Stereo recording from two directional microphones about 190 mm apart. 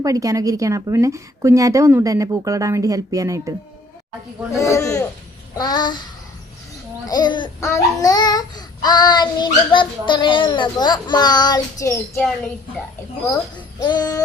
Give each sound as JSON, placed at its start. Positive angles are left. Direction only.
{"t": 0.0, "sound": "a woman's voice", "side_deg": -15}
{"t": 4.5, "sound": "a man's voice", "side_deg": 15}
{"t": 5.5, "sound": "child singing", "side_deg": 20}
{"t": 7.0, "sound": "speech", "side_deg": 20}
{"t": 7.6, "sound": "child singing", "side_deg": 15}
{"t": 13.2, "sound": "a child's voice", "side_deg": 20}